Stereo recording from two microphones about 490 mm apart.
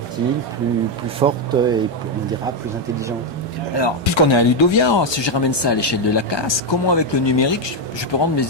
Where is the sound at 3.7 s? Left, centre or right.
Left.